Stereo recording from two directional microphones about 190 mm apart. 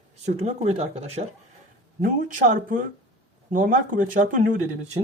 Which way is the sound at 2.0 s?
45° right (ahead or behind).